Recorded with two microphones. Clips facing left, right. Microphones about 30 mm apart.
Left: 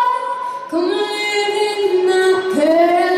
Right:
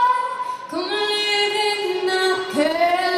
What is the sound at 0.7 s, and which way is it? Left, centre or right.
Music, right.